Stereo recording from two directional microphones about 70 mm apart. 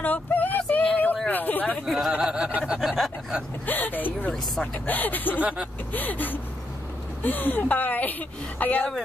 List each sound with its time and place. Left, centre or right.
0.0 s a sound: left
1.9 s speech: centre
2.1 s speech: centre
2.6 s snicker: centre
3.6 s a woman's voice: left
5.4 s speech: centre
5.9 s a woman's voice: left